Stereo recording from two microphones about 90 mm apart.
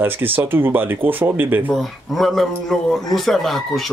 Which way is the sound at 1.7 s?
Centre (ahead or behind).